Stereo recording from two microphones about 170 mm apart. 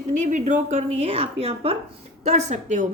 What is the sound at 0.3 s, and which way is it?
A woman's voice, 45° right (ahead or behind).